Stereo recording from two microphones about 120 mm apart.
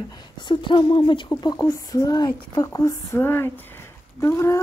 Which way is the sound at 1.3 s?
30° left (ahead or behind).